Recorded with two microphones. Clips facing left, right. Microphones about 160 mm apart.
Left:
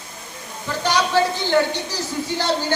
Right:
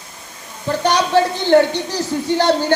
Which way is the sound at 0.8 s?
55° right (ahead or behind).